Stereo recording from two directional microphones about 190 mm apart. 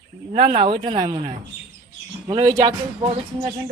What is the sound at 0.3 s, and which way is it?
Speech, 25° right (ahead or behind).